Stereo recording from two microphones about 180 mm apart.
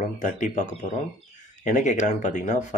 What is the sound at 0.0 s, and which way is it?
A man's voice, 45° left (ahead or behind).